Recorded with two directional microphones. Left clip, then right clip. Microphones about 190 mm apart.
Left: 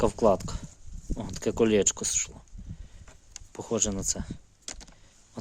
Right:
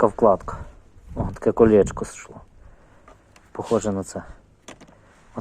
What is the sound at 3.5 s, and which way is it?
Speech, 25° left (ahead or behind).